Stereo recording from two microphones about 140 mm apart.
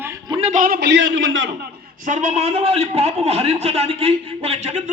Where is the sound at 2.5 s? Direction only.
45° right (ahead or behind).